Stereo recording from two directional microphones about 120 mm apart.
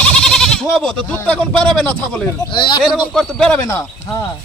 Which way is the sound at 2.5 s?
40° left (ahead or behind).